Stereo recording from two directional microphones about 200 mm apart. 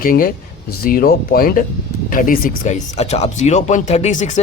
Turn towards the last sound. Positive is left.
turn(degrees=35)  # may be behind; listen again after turning